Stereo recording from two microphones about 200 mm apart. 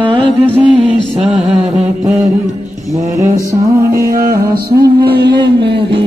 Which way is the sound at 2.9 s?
15° right (ahead or behind).